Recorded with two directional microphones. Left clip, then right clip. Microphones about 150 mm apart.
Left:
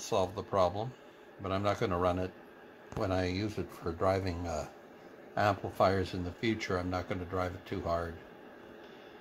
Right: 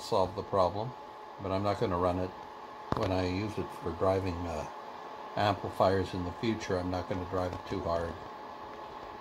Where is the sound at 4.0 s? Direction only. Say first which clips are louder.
Right 1 dB; 10° left (ahead or behind).